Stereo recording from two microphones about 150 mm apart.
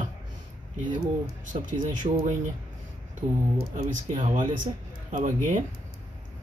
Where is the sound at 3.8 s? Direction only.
55° right (ahead or behind).